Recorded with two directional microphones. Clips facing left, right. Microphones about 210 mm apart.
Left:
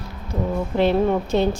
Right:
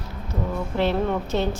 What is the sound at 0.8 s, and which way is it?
Speech, 15° left (ahead or behind).